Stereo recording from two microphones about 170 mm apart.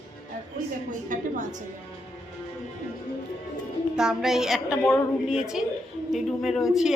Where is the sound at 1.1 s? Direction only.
45° right (ahead or behind).